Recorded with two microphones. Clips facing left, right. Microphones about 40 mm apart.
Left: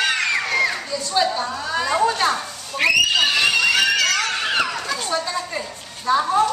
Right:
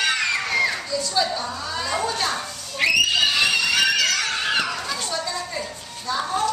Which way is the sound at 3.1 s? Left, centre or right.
Centre.